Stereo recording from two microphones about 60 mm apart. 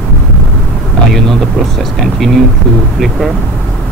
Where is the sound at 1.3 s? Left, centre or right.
Centre.